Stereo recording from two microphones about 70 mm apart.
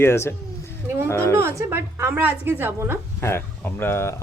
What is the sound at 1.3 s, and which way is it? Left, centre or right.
Speech, right.